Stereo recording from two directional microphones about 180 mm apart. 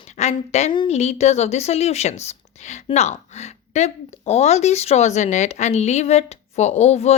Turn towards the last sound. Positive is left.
turn(degrees=35)  # may be behind; listen again after turning